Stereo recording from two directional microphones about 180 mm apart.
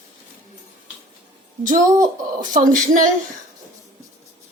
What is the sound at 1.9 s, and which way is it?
Speech, 20° right (ahead or behind).